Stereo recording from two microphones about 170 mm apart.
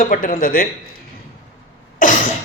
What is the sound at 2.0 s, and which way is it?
Cough, 50° left (ahead or behind).